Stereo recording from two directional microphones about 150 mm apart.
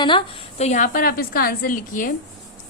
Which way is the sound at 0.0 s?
35° left (ahead or behind).